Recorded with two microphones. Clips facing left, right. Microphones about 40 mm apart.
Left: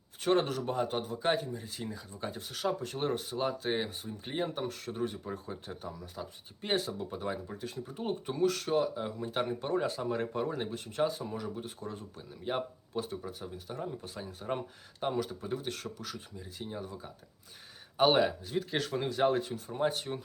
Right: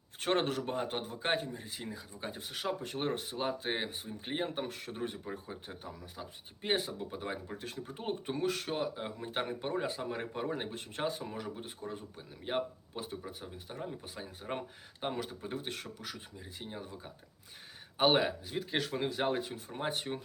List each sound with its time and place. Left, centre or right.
0.2 s speech: right
0.6 s speech: right
1.7 s speech: centre
5.2 s speech: centre
7.4 s speech: right
8.3 s speech: right
13.0 s speech: centre
15.1 s speech: right; by 19.7 s centre
19.8 s speech: right